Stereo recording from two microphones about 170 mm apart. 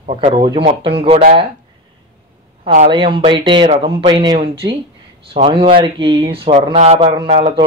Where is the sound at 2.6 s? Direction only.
45° right (ahead or behind).